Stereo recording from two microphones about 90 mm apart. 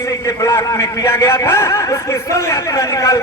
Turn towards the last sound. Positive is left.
turn(degrees=35)  # may be behind; listen again after turning